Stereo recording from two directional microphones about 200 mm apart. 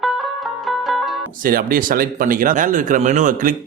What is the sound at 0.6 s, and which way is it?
Music, centre (ahead or behind).